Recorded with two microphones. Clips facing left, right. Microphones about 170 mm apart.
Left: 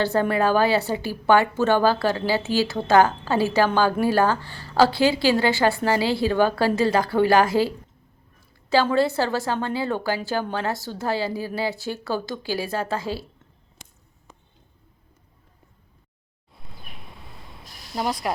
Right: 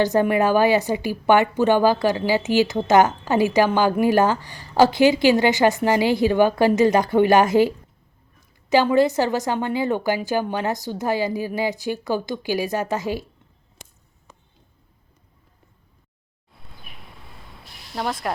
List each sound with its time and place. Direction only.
0.0 s a woman's voice: 15° right (ahead or behind)
8.7 s a woman's voice: 15° right (ahead or behind)
17.9 s speech: 5° left (ahead or behind)